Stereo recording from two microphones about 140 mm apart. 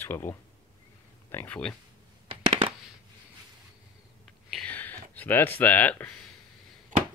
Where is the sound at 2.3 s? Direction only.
40° right (ahead or behind).